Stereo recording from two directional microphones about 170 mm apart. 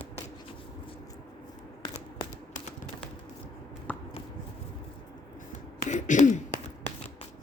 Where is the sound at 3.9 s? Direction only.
10° left (ahead or behind).